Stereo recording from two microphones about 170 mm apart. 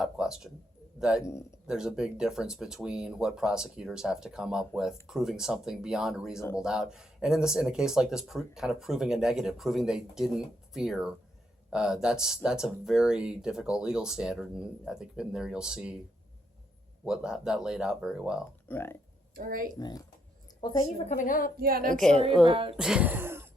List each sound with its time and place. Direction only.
0.0 s a man's voice: 5° right (ahead or behind)
1.2 s speech: 15° left (ahead or behind)
1.6 s speech: 5° right (ahead or behind)
17.1 s speech: 5° right (ahead or behind)
18.7 s speech: 15° left (ahead or behind)
19.4 s speech: 55° right (ahead or behind)
21.1 s a woman's voice: 50° left (ahead or behind)
21.6 s speech: 60° right (ahead or behind)
21.8 s speech: 5° left (ahead or behind)
22.1 s a woman's voice: 35° right (ahead or behind)
22.8 s speech: 5° right (ahead or behind)